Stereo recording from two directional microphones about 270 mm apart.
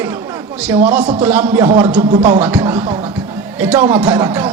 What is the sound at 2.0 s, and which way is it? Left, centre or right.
Speech, right.